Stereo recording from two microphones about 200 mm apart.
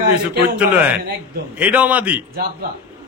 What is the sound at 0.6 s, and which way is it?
Speech, 5° right (ahead or behind).